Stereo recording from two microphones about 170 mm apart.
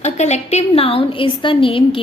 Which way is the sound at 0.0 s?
40° left (ahead or behind).